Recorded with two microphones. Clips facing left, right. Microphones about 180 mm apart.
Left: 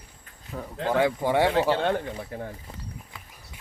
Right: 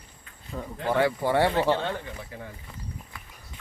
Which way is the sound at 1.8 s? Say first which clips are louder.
Left 6 dB; 60° left (ahead or behind).